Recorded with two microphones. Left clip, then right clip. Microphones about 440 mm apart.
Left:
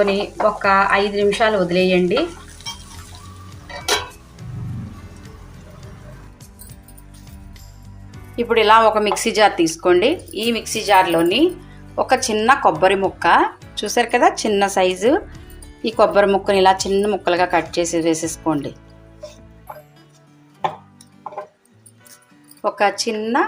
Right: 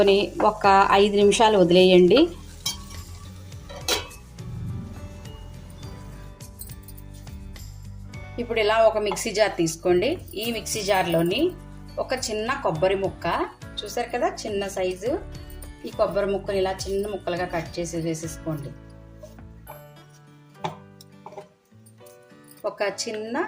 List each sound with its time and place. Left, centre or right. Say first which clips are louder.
0.0 s a woman's voice: left 2 dB; right
8.4 s speech: left 8 dB; right
22.6 s speech: left 9 dB; right